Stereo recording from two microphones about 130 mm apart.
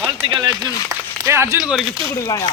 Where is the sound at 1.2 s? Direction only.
20° right (ahead or behind).